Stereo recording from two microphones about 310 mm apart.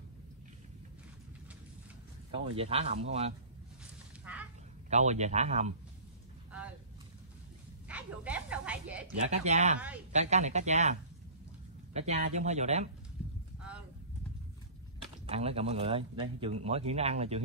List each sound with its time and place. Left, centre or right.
2.5 s speech: centre
4.8 s speech: right
7.9 s a sound: centre
9.4 s speech: right
9.8 s a woman's voice: centre
10.1 s speech: right
13.2 s clip-clop: centre
15.2 s speech: centre